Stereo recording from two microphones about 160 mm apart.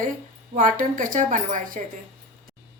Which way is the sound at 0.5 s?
55° right (ahead or behind).